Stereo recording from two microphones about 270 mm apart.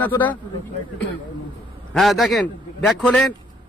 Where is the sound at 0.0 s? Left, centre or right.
Centre.